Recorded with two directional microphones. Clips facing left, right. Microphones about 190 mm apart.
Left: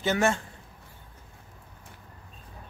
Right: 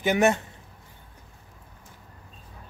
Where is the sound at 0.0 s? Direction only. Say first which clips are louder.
Right 4 dB; 15° right (ahead or behind).